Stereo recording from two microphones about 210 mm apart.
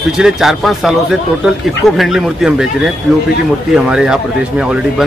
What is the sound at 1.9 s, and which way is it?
Speech, centre (ahead or behind).